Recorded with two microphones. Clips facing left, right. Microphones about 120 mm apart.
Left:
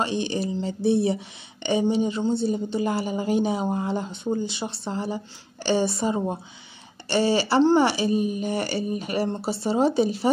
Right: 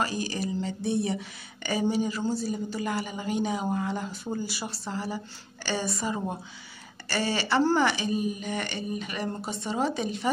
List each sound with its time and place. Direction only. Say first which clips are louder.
0.0 s a woman's voice: left 4 dB; 25° left (ahead or behind)